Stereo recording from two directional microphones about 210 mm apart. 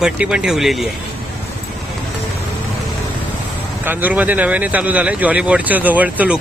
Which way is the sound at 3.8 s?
10° right (ahead or behind).